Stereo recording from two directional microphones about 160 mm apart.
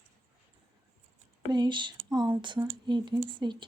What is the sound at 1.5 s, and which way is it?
Speech, 30° right (ahead or behind).